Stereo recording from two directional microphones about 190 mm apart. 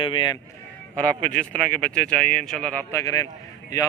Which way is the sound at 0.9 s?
5° left (ahead or behind).